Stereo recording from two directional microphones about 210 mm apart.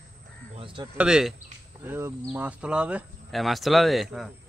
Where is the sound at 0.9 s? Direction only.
5° right (ahead or behind).